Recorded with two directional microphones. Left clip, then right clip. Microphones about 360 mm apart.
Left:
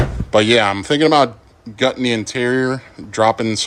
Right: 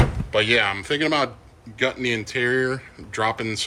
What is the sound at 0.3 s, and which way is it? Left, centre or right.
A man's voice, centre.